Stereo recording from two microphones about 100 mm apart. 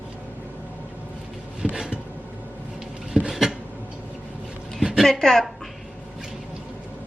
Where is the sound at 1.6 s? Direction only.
5° right (ahead or behind).